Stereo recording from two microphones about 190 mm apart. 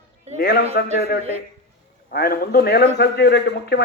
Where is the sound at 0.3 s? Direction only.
55° left (ahead or behind).